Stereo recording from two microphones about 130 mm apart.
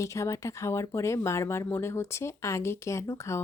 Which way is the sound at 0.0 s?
20° left (ahead or behind).